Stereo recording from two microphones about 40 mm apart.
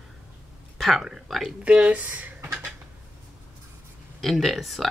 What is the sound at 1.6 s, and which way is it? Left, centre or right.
Speech, right.